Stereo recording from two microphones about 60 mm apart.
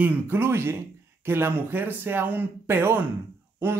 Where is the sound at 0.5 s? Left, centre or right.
Right.